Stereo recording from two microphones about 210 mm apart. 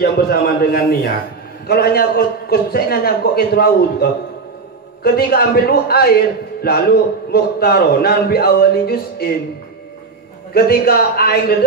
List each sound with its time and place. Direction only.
0.0 s a man's voice: 50° left (ahead or behind)
10.5 s a man's voice: 45° left (ahead or behind)